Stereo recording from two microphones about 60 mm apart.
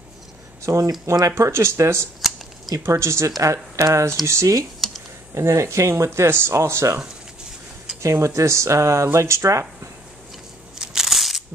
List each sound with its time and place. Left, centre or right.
0.6 s speech: right
1.3 s speech: right
8.0 s speech: right
10.8 s crushing: centre